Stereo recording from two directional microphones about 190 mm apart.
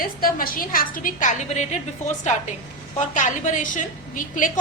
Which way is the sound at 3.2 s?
40° left (ahead or behind).